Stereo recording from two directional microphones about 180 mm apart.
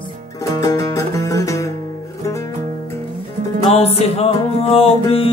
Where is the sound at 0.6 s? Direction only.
20° left (ahead or behind).